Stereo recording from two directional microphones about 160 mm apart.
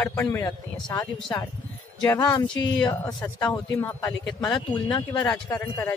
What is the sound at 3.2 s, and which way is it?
Speech, 10° left (ahead or behind).